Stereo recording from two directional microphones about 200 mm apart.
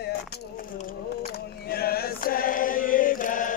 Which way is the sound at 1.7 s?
50° left (ahead or behind).